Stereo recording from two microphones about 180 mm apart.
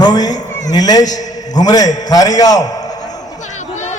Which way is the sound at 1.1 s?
20° left (ahead or behind).